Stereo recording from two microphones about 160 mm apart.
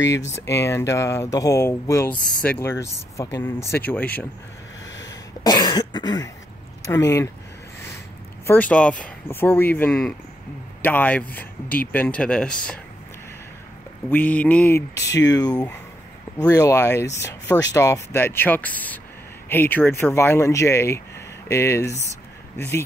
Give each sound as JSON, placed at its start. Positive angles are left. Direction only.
{"t": 0.5, "sound": "speech", "side_deg": 15}
{"t": 5.4, "sound": "cough", "side_deg": 25}
{"t": 6.9, "sound": "speech", "side_deg": 15}
{"t": 8.5, "sound": "speech", "side_deg": 10}
{"t": 14.0, "sound": "speech", "side_deg": 10}
{"t": 15.0, "sound": "speech", "side_deg": 90}
{"t": 15.2, "sound": "speech", "side_deg": 25}